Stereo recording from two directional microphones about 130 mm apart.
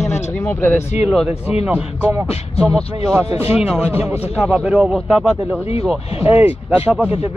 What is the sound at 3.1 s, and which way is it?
Speech, 20° right (ahead or behind).